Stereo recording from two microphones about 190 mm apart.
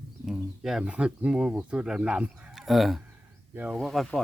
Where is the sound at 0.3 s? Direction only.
Centre (ahead or behind).